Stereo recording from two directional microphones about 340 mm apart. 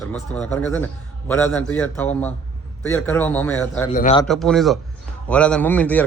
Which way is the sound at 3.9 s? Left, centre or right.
Centre.